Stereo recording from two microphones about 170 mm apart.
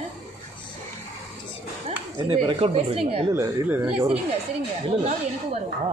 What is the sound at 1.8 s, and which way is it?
Speech, 35° right (ahead or behind).